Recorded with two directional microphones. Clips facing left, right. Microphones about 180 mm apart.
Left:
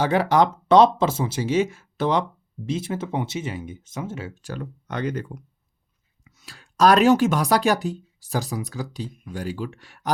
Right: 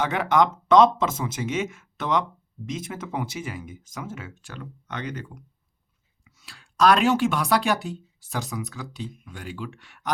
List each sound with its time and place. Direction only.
0.0 s speech: 35° left (ahead or behind)